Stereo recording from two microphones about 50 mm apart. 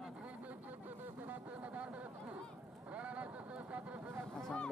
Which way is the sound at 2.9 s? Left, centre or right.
Right.